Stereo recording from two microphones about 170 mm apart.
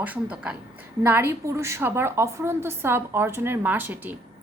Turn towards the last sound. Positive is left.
turn(degrees=-10)  # may be behind; listen again after turning